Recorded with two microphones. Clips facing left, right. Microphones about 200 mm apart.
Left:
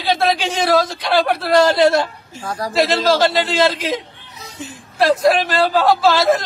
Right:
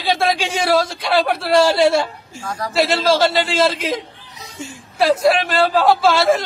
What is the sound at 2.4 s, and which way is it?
Speech, 35° left (ahead or behind).